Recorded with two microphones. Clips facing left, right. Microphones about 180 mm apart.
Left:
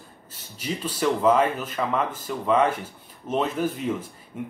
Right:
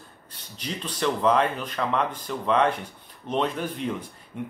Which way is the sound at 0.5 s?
5° left (ahead or behind).